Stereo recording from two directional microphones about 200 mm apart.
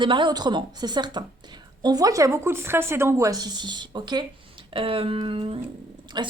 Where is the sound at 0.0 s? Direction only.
25° right (ahead or behind).